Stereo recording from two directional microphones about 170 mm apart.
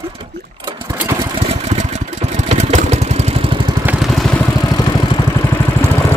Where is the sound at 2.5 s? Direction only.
40° right (ahead or behind).